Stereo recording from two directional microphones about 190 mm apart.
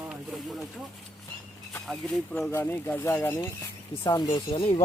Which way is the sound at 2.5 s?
10° left (ahead or behind).